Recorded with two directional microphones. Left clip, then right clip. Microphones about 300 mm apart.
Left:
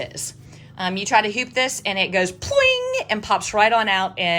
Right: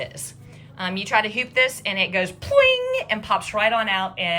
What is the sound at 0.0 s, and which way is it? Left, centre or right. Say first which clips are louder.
A woman's voice: left 2 dB; centre.